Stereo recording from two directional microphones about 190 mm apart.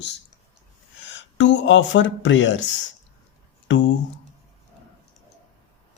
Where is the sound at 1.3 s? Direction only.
75° left (ahead or behind).